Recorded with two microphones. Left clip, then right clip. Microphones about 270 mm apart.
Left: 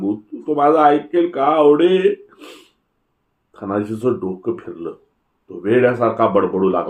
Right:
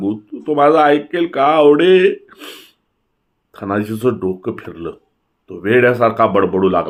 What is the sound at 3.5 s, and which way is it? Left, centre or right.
Speech, right.